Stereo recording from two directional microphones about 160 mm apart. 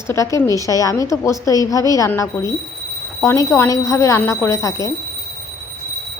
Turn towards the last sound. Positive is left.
turn(degrees=20)  # may be behind; listen again after turning